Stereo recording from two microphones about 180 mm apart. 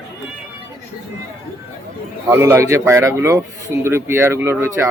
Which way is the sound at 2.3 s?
15° right (ahead or behind).